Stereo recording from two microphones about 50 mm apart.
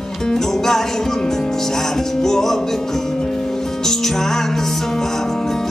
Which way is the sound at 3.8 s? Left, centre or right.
Centre.